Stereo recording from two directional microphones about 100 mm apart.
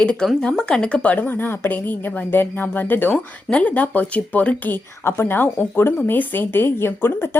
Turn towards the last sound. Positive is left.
turn(degrees=25)  # may be behind; listen again after turning